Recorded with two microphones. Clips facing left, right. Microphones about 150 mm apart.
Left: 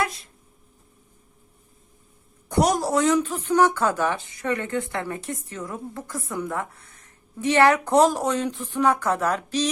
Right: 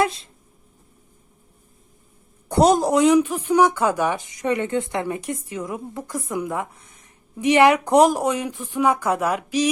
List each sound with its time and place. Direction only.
0.0 s speech: 25° right (ahead or behind)
2.5 s a woman's voice: 25° right (ahead or behind); by 9.6 s 10° right (ahead or behind)